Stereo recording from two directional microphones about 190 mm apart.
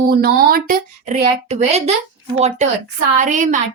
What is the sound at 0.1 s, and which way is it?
A woman's voice, 50° right (ahead or behind).